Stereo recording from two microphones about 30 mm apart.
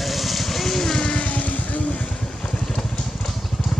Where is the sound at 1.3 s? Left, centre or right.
Left.